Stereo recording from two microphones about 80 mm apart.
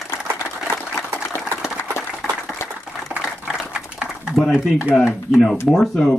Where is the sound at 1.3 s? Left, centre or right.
Left.